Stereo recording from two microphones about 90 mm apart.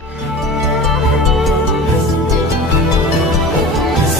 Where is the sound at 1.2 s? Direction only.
Centre (ahead or behind).